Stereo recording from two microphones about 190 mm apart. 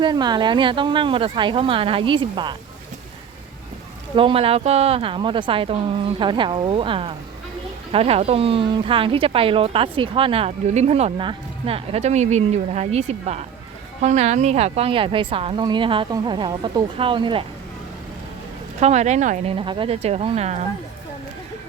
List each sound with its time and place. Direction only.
0.0 s a woman's voice: 20° right (ahead or behind)
4.1 s a woman's voice: 25° right (ahead or behind)
18.8 s speech: 35° right (ahead or behind)